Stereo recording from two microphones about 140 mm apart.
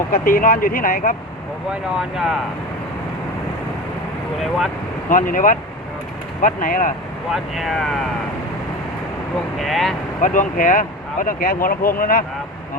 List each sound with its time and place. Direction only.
0.1 s speech: 90° left
2.0 s speech: 5° right (ahead or behind)
4.4 s speech: centre (ahead or behind)
5.0 s speech: 75° left (ahead or behind)
7.3 s speech: centre (ahead or behind)
9.6 s speech: centre (ahead or behind)
10.2 s speech: 70° left (ahead or behind); by 12.2 s 90° left